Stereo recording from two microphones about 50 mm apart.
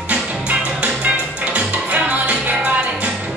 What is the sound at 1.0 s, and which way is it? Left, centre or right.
Music, right.